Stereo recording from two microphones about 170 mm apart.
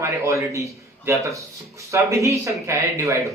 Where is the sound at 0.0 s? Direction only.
15° right (ahead or behind).